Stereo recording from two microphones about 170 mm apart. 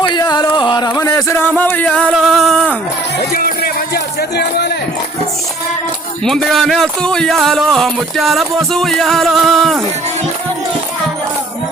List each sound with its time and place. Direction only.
0.1 s a sound: 25° left (ahead or behind); by 2.7 s 5° left (ahead or behind)
3.3 s speech: 60° left (ahead or behind)
6.2 s speech: centre (ahead or behind)